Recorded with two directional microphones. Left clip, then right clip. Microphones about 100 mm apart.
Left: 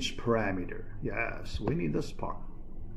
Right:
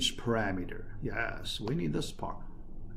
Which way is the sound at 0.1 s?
25° right (ahead or behind).